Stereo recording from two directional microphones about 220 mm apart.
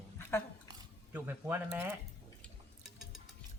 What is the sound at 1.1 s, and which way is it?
Speech, 10° right (ahead or behind).